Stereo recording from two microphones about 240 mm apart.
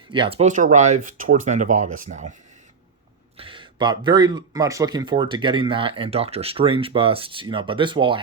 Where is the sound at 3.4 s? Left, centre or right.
Right.